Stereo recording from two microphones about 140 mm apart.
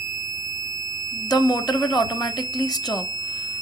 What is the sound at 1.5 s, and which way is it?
Speech, 30° left (ahead or behind).